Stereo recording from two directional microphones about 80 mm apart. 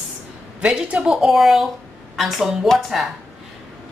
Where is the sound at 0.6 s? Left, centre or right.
Centre.